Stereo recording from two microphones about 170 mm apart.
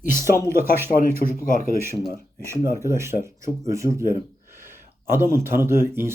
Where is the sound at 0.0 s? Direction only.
15° right (ahead or behind).